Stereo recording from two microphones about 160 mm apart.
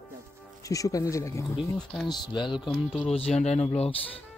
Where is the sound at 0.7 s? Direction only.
20° left (ahead or behind); by 4.2 s 40° left (ahead or behind).